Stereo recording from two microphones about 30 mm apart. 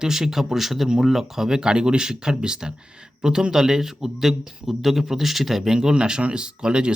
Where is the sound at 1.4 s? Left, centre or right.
Right.